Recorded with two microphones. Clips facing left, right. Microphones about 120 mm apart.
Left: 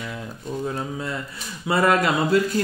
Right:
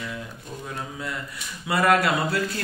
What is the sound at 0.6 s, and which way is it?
A man's voice, 25° left (ahead or behind).